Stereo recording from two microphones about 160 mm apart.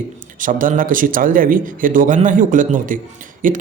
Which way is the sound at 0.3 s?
55° right (ahead or behind).